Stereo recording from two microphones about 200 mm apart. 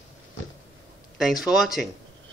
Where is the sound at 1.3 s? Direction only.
Centre (ahead or behind).